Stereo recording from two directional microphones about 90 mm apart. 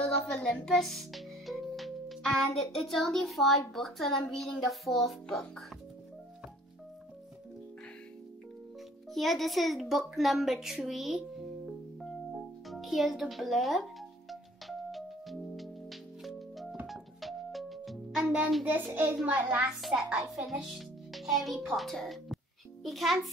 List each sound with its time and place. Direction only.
0.0 s speech: 10° left (ahead or behind)
9.1 s a child's voice: centre (ahead or behind)
14.3 s music: centre (ahead or behind)
18.6 s a child's voice: 20° right (ahead or behind); by 23.3 s centre (ahead or behind)